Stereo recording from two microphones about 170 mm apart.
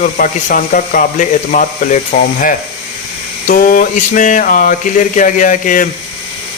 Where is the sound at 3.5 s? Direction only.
55° left (ahead or behind).